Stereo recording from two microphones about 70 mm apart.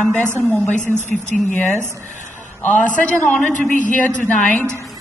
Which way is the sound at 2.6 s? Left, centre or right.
Left.